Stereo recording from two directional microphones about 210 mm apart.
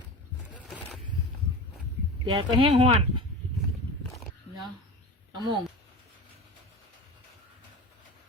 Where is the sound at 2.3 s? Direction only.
25° right (ahead or behind).